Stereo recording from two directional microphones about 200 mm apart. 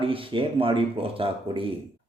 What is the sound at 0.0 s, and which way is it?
Speech, 25° right (ahead or behind).